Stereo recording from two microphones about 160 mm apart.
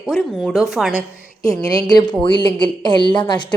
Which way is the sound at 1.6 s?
25° left (ahead or behind).